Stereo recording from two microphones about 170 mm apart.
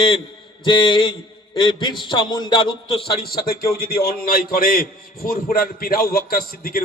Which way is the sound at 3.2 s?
60° left (ahead or behind).